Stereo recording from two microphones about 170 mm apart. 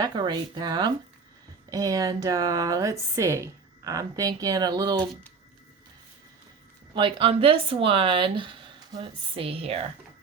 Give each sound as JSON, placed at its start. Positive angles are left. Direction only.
{"t": 0.0, "sound": "speech", "side_deg": -25}
{"t": 6.9, "sound": "speech", "side_deg": -30}